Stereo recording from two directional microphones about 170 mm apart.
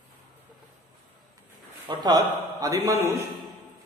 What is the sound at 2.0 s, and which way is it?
A man's voice, 25° right (ahead or behind).